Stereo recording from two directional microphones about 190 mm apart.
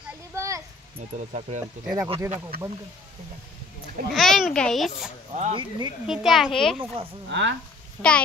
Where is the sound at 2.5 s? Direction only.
50° right (ahead or behind).